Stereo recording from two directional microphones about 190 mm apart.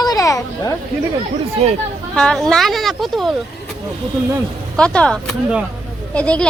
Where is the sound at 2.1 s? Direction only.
5° left (ahead or behind).